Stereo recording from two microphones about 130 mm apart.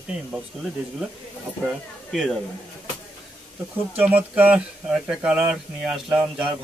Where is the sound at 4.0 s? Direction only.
15° right (ahead or behind).